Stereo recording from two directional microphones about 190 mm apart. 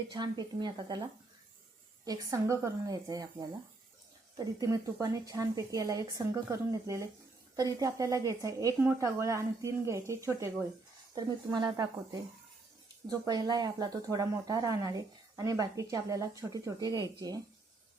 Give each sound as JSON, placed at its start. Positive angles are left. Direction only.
{"t": 0.1, "sound": "speech", "side_deg": -20}
{"t": 2.0, "sound": "speech", "side_deg": -15}
{"t": 4.4, "sound": "a woman's voice", "side_deg": -20}
{"t": 13.1, "sound": "speech", "side_deg": -20}